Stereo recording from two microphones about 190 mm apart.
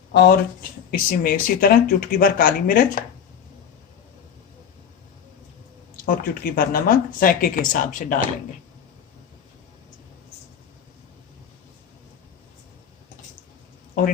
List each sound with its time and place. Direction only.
0.1 s speech: 60° left (ahead or behind)
6.1 s speech: 50° left (ahead or behind)